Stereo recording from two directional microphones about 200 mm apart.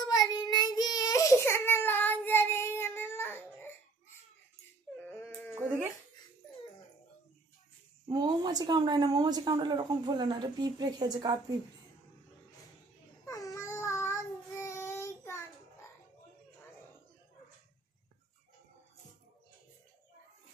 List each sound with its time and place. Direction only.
0.0 s child singing: 20° left (ahead or behind)
5.0 s a sound: 10° left (ahead or behind)
5.5 s dog: 10° right (ahead or behind)
8.1 s a woman's voice: 20° right (ahead or behind)
13.2 s child singing: 15° left (ahead or behind)